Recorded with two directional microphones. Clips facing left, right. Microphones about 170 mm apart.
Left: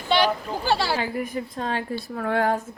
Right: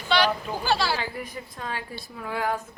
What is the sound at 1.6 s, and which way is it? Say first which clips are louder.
Speech: left 5 dB; 45° left (ahead or behind).